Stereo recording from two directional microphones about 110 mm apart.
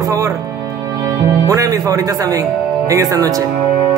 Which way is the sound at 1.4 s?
30° right (ahead or behind).